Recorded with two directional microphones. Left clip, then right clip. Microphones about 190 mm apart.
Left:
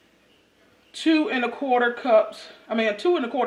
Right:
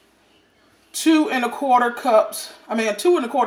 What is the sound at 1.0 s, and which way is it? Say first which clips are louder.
Speech: right 4 dB; 10° right (ahead or behind).